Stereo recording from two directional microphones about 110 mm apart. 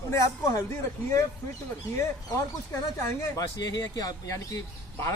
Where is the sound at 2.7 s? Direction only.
30° left (ahead or behind).